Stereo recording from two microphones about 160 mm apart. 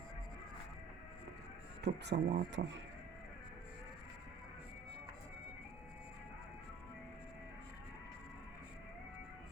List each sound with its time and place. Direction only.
1.8 s speech: 90° right